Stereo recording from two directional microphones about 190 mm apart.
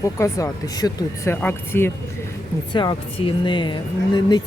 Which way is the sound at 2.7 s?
25° left (ahead or behind).